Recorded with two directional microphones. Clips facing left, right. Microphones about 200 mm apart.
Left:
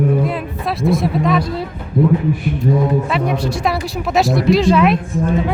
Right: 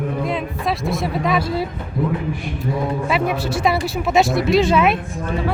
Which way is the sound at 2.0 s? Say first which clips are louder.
Left 7 dB; 25° left (ahead or behind).